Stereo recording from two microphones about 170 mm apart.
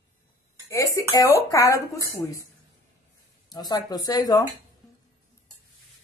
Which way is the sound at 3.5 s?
25° left (ahead or behind).